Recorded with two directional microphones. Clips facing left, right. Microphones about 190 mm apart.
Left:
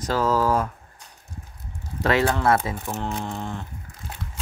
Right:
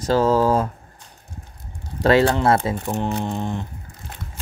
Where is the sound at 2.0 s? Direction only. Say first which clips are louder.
Right 5 dB; 30° right (ahead or behind).